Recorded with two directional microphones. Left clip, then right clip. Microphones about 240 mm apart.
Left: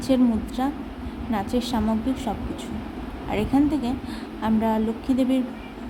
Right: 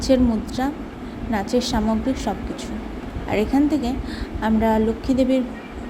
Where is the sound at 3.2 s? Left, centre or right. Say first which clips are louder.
Right 3 dB; centre.